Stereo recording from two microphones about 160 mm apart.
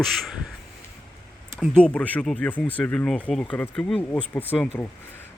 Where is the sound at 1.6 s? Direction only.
5° left (ahead or behind).